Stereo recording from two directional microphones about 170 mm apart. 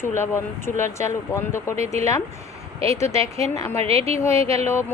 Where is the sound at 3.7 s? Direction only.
35° right (ahead or behind).